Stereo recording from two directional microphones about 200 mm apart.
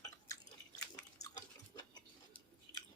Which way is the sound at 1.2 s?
20° left (ahead or behind).